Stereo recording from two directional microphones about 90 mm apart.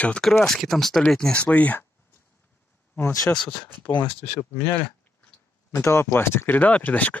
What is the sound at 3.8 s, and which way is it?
Speech, 65° left (ahead or behind).